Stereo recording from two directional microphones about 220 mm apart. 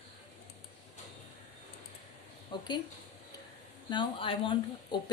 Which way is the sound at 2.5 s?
20° left (ahead or behind).